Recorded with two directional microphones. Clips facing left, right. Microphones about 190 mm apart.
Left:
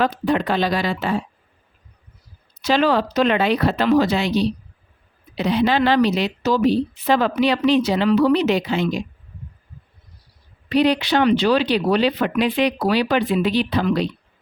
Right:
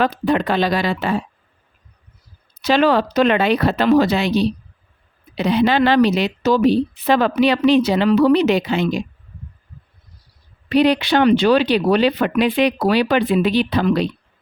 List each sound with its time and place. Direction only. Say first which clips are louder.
0.0 s speech: right 2 dB; 65° right (ahead or behind)
2.6 s a woman's voice: right 2 dB; 60° right (ahead or behind)
5.4 s a woman's voice: right 2 dB; 60° right (ahead or behind)
10.7 s a woman's voice: right 2 dB; 60° right (ahead or behind)